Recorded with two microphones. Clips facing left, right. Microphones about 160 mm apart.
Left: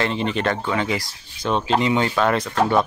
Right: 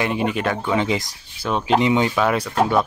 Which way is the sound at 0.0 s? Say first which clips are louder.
Right 1 dB; 10° right (ahead or behind).